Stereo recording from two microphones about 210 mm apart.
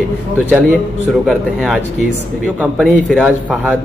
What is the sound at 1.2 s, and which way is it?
A man's voice, centre (ahead or behind).